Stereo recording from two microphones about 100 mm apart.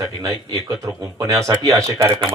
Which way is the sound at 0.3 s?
35° right (ahead or behind).